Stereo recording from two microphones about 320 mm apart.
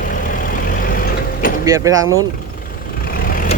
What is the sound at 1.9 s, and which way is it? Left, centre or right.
Speech, right.